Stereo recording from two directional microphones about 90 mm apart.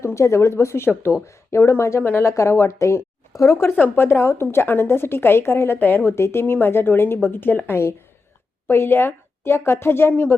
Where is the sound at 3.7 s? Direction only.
25° left (ahead or behind).